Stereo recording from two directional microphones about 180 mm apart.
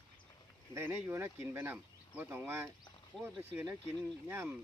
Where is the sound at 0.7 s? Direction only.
10° right (ahead or behind).